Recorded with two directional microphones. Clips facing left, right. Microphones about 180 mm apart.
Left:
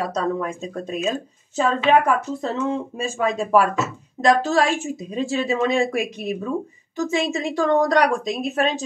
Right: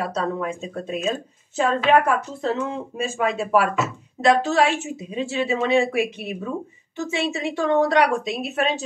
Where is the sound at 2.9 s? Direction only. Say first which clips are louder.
Left 1 dB; 35° left (ahead or behind).